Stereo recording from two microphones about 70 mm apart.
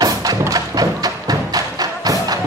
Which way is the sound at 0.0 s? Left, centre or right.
Right.